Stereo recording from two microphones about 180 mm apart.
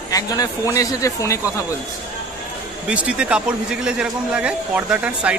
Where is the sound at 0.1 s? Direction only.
20° left (ahead or behind).